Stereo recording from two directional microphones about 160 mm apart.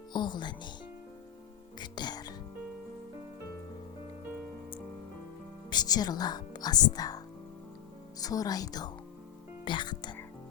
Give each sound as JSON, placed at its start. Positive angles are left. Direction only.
{"t": 0.1, "sound": "speech", "side_deg": 30}
{"t": 1.8, "sound": "speech", "side_deg": 25}
{"t": 5.7, "sound": "speech", "side_deg": 25}
{"t": 8.2, "sound": "a woman's voice", "side_deg": 25}